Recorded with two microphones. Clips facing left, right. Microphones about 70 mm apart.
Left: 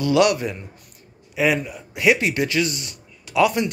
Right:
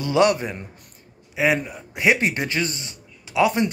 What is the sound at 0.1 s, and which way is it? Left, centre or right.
Speech, right.